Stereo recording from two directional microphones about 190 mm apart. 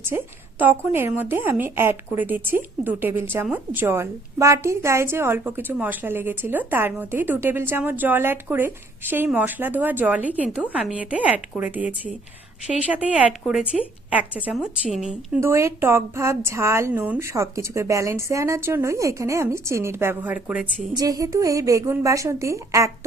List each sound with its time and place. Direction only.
0.6 s a woman's voice: 10° right (ahead or behind)
15.4 s a woman's voice: 15° right (ahead or behind)
20.9 s a woman's voice: 20° right (ahead or behind)